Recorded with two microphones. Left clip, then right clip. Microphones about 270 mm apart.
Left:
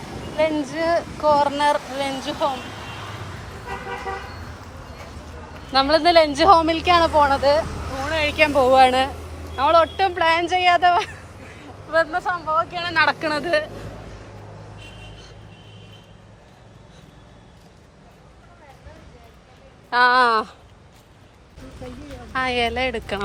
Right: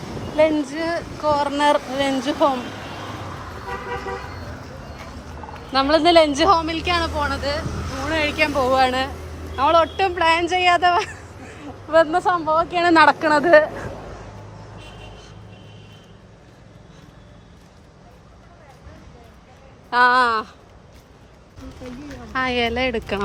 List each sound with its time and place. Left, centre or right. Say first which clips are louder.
0.3 s speech: right 3 dB; centre
5.7 s a woman's voice: right 1 dB; centre
7.9 s a woman's voice: left 1 dB; centre
19.9 s a woman's voice: even; centre
22.3 s speech: even; centre